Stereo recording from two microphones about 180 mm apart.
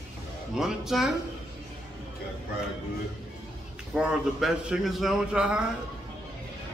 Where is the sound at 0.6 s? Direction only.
Centre (ahead or behind).